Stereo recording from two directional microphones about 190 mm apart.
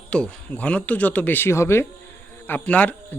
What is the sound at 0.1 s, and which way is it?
Speech, 5° left (ahead or behind).